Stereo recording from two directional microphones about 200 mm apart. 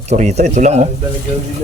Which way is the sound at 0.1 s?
35° right (ahead or behind).